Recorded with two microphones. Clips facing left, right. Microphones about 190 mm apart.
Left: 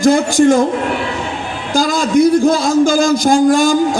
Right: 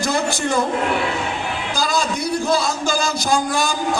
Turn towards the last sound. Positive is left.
turn(degrees=50)  # may be behind; listen again after turning